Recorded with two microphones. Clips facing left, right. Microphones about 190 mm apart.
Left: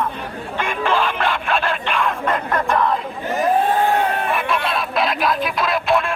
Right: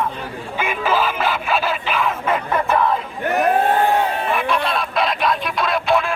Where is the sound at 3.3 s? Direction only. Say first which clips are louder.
Right 2 dB; 65° right (ahead or behind).